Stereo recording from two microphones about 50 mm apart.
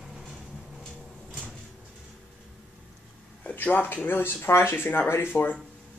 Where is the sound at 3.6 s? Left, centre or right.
Left.